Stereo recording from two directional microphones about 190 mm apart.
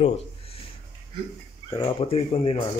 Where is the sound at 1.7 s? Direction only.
25° left (ahead or behind).